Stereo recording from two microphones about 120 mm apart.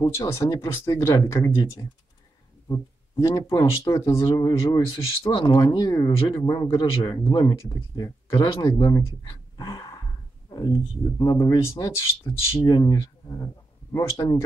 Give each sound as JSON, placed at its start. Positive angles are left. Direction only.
{"t": 0.0, "sound": "speech", "side_deg": 30}
{"t": 1.5, "sound": "speech", "side_deg": 35}
{"t": 9.6, "sound": "a sound", "side_deg": 30}
{"t": 10.5, "sound": "speech", "side_deg": 30}